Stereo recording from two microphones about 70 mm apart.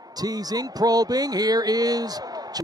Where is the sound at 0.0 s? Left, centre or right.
Right.